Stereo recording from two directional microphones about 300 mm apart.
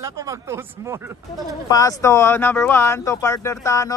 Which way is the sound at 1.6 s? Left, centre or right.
Centre.